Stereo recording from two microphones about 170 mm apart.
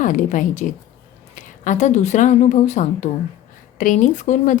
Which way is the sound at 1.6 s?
45° left (ahead or behind).